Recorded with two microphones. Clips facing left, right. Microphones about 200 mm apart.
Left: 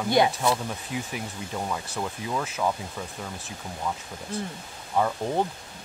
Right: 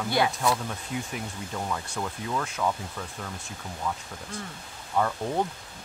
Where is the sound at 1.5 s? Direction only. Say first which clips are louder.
Left 1 dB; 10° left (ahead or behind).